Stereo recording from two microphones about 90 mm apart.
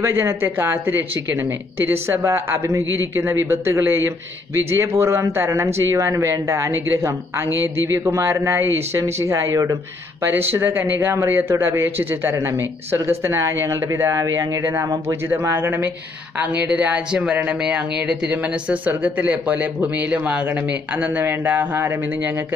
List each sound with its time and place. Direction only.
0.0 s speech: 30° right (ahead or behind)
15.2 s speech: 25° right (ahead or behind)